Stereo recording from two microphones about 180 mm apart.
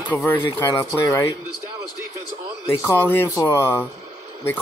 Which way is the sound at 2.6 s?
15° left (ahead or behind).